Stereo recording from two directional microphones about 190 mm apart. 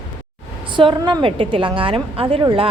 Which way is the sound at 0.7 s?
25° right (ahead or behind).